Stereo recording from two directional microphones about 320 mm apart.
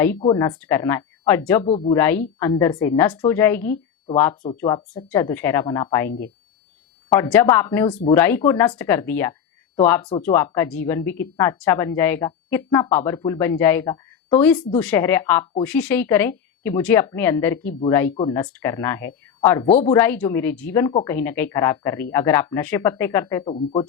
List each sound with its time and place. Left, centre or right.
0.2 s a woman's voice: centre
1.7 s speech: centre
2.0 s a woman's voice: centre
6.1 s speech: left
7.1 s a woman's voice: centre
10.1 s speech: left
10.3 s a woman's voice: centre